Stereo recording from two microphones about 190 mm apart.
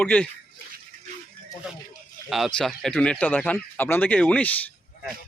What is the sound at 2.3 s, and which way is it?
Speech, centre (ahead or behind).